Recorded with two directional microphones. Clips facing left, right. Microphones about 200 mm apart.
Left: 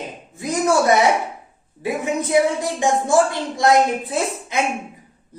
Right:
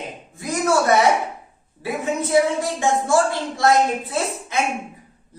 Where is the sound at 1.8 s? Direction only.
15° left (ahead or behind).